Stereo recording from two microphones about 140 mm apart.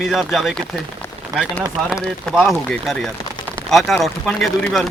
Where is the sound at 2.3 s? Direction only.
5° left (ahead or behind).